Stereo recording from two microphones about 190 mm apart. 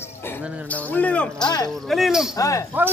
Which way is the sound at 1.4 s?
20° left (ahead or behind).